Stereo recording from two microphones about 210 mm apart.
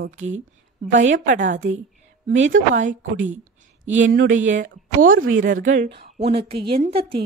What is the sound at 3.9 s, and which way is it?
Speech, 65° right (ahead or behind).